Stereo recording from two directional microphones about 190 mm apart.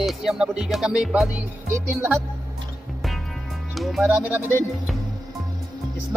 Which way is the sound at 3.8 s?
Centre (ahead or behind).